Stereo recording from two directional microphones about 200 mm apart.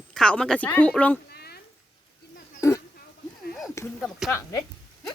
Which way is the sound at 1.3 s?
50° left (ahead or behind).